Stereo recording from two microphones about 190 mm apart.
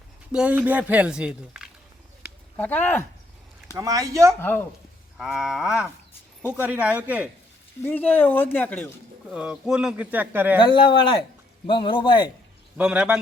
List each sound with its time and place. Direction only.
0.3 s speech: 5° right (ahead or behind)
2.6 s speech: 10° left (ahead or behind)
3.8 s speech: 15° right (ahead or behind)
4.4 s speech: 10° left (ahead or behind)
5.1 s speech: 5° right (ahead or behind)
7.8 s speech: 10° left (ahead or behind)
9.3 s speech: 5° right (ahead or behind)
10.6 s a man's voice: 25° left (ahead or behind)
12.7 s speech: 5° right (ahead or behind)